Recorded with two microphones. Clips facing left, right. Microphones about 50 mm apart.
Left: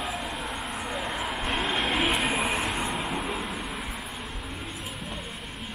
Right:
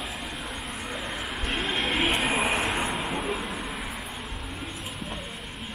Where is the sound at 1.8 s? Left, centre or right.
Centre.